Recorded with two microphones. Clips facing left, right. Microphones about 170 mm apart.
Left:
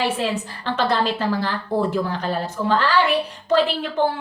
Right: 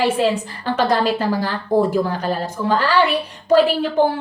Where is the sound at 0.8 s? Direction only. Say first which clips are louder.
Right 3 dB; 10° right (ahead or behind).